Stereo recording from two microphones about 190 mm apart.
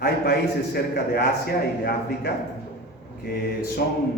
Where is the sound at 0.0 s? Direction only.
55° left (ahead or behind).